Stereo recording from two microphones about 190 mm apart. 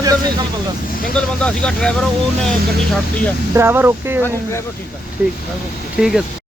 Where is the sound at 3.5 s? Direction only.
15° right (ahead or behind).